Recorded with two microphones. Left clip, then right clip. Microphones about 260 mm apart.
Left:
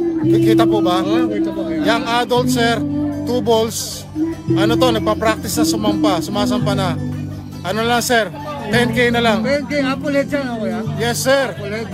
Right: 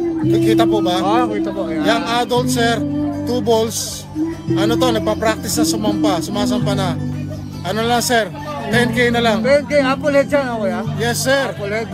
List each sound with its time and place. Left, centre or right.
0.3 s speech: left
1.0 s speech: centre
1.9 s speech: left
9.8 s speech: centre
11.0 s speech: left